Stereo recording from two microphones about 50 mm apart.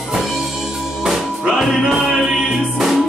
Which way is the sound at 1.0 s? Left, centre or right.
Centre.